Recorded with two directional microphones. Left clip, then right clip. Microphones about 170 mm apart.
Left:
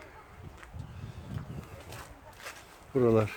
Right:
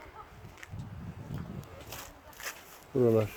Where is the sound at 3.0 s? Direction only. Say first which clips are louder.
Left 1 dB; 25° left (ahead or behind).